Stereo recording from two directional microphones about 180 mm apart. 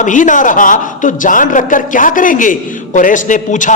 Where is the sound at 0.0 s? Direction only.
45° left (ahead or behind).